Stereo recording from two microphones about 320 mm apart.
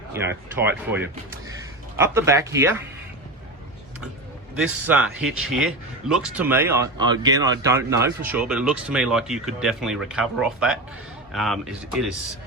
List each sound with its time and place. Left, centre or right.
0.1 s speech: centre
4.8 s speech: centre